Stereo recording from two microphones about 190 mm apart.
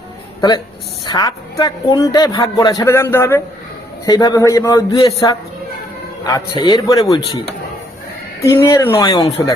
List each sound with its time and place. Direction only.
1.0 s a man's voice: 20° left (ahead or behind)
8.4 s speech: 15° left (ahead or behind)